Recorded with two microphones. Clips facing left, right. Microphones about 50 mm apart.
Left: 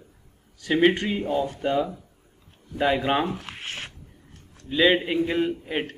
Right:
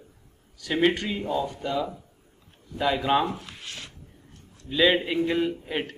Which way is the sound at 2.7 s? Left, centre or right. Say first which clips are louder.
Left 1 dB; left.